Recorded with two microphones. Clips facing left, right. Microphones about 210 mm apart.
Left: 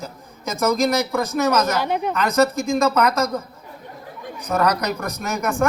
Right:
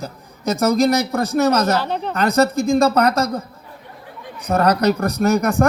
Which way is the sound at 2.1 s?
35° right (ahead or behind).